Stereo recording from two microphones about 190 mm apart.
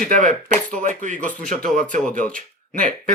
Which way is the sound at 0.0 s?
45° right (ahead or behind).